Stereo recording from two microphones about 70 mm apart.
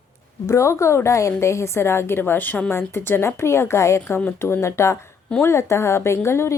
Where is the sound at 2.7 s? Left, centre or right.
Left.